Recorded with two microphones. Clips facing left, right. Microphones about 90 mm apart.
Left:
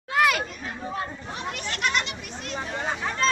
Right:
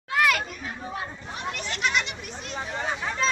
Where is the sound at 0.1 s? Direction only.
5° left (ahead or behind).